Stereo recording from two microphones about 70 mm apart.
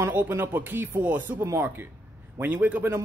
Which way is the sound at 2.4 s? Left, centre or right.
Right.